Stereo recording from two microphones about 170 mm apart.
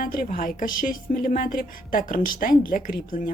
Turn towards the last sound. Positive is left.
turn(degrees=55)  # may be behind; listen again after turning